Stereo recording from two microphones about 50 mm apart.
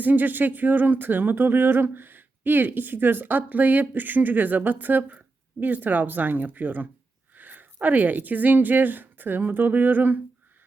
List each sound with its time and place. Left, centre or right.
0.0 s speech: right